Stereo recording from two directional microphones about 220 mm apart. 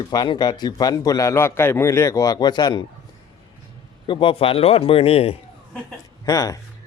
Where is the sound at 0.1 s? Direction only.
20° left (ahead or behind).